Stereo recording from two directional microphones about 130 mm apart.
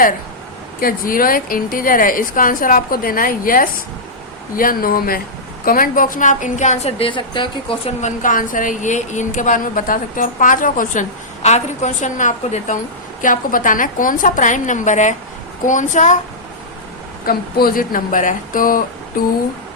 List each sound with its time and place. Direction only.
0.9 s a woman's voice: 90° left; by 6.9 s 65° left (ahead or behind)
7.0 s speech: 40° left (ahead or behind)
8.0 s a woman's voice: 90° left
11.4 s a woman's voice: 60° left (ahead or behind); by 12.8 s 75° left (ahead or behind)
13.2 s a woman's voice: 90° left; by 16.1 s 70° left (ahead or behind)
17.7 s a woman's voice: 90° left